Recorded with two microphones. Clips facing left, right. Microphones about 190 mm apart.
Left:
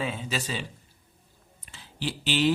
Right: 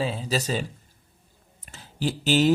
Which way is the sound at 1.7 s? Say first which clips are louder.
Right 5 dB; 45° right (ahead or behind).